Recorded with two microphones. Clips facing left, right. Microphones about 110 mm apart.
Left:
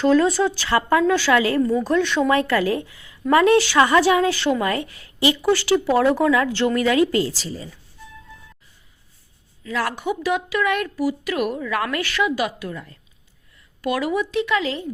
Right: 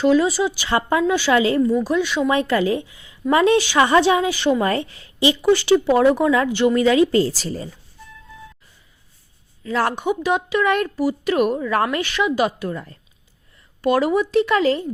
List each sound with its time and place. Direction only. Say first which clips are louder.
0.0 s speech: even; 10° right (ahead or behind)
1.6 s speech: right 1 dB; 5° right (ahead or behind)
2.3 s a woman's voice: right 3 dB; 20° right (ahead or behind)
4.6 s a woman's voice: right 2 dB; 30° right (ahead or behind)
7.3 s speech: right 4 dB; 50° right (ahead or behind)
9.6 s speech: right 4 dB; 30° right (ahead or behind)